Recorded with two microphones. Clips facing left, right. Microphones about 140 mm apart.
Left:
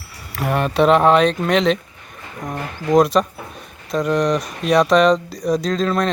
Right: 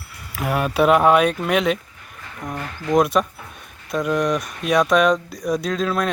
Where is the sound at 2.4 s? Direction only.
15° left (ahead or behind).